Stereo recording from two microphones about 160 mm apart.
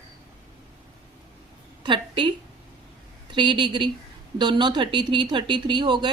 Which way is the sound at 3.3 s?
30° right (ahead or behind).